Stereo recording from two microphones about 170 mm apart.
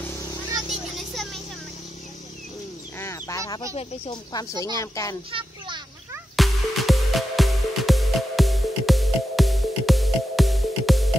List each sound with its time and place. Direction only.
0.7 s a sound: centre (ahead or behind)
3.0 s fowl: 15° left (ahead or behind)
3.7 s speech: 25° left (ahead or behind)
6.3 s music: centre (ahead or behind)